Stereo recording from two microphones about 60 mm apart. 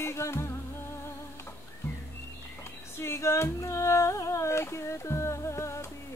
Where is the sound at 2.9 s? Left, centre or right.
Left.